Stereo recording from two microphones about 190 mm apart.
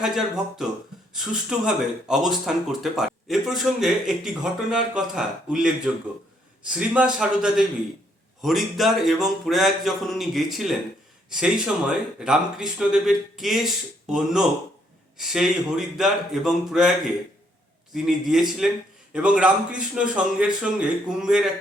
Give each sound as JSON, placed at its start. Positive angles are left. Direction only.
{"t": 0.0, "sound": "speech", "side_deg": 0}
{"t": 17.9, "sound": "speech", "side_deg": 0}